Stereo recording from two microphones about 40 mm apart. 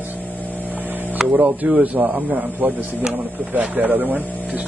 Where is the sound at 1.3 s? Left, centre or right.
Right.